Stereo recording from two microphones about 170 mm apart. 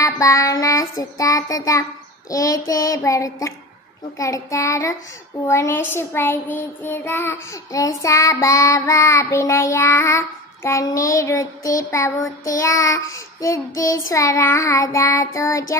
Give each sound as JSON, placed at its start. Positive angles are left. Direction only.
{"t": 0.0, "sound": "child singing", "side_deg": 20}